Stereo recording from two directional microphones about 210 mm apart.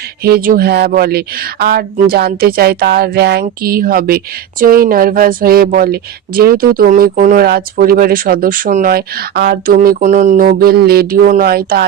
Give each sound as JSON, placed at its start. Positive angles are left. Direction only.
{"t": 0.2, "sound": "speech", "side_deg": -45}